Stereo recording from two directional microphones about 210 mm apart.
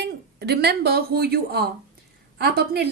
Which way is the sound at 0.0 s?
50° right (ahead or behind).